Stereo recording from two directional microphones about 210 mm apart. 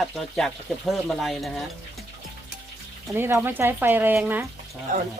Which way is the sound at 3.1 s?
10° right (ahead or behind).